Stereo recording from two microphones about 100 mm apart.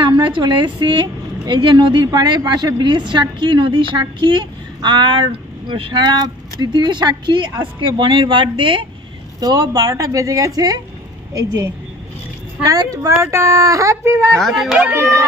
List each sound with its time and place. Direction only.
0.0 s a woman's voice: 55° right (ahead or behind)
9.4 s a woman's voice: 40° right (ahead or behind)
14.3 s speech: centre (ahead or behind)
14.9 s speech: 25° right (ahead or behind)